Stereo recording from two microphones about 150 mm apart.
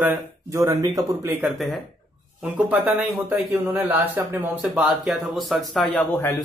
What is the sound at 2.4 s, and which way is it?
A man's voice, 10° right (ahead or behind).